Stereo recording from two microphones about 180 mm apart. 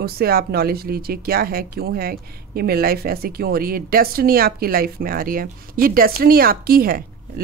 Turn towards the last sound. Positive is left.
turn(degrees=-55)  # may be behind; listen again after turning